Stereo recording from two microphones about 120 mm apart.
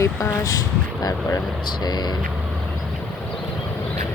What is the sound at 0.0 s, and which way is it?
Speech, 25° left (ahead or behind).